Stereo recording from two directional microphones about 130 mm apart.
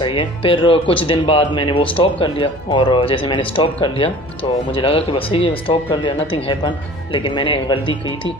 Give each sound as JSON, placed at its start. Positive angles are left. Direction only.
{"t": 0.0, "sound": "speech", "side_deg": 45}